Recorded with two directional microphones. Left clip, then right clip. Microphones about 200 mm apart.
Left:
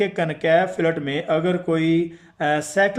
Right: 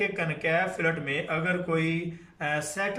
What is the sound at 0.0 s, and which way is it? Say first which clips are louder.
Speech: left 7 dB; 35° left (ahead or behind).